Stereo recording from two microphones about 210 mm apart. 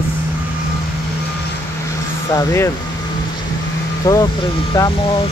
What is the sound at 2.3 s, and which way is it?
Speech, 15° left (ahead or behind).